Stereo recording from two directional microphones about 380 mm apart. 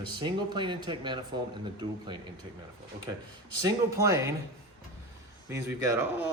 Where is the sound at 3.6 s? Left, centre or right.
Centre.